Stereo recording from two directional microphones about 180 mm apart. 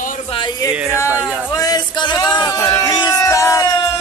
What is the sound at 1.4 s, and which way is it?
Speech, 20° left (ahead or behind).